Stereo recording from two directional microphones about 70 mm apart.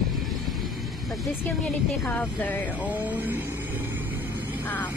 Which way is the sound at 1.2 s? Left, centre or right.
Centre.